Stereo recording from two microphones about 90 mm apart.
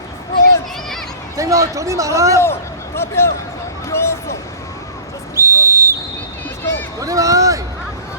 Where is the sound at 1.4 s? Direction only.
35° right (ahead or behind).